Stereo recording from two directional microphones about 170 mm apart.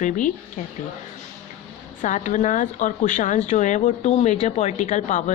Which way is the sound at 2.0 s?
45° left (ahead or behind).